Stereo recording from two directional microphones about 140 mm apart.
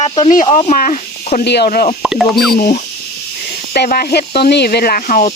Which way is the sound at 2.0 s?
Centre (ahead or behind).